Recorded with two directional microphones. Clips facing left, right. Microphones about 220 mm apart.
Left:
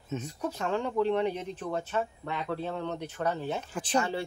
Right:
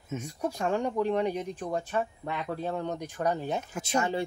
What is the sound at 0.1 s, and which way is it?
Speech, 10° right (ahead or behind).